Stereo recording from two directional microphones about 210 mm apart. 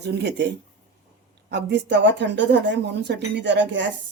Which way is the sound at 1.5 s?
55° right (ahead or behind).